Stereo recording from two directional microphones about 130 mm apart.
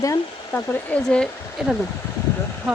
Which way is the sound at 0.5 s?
10° left (ahead or behind).